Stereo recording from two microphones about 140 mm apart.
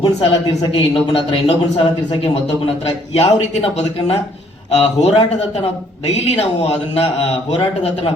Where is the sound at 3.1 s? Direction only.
50° left (ahead or behind).